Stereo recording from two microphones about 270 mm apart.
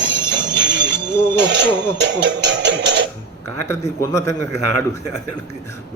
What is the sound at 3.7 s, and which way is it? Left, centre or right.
Speech, centre.